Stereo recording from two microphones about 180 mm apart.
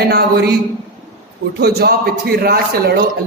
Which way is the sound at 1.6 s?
60° right (ahead or behind).